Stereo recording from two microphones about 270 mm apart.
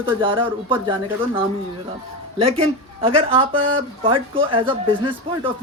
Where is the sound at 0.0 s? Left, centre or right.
Centre.